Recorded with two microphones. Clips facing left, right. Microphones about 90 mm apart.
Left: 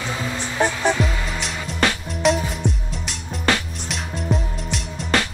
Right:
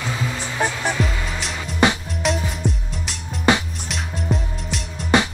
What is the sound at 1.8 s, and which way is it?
Music, 15° right (ahead or behind).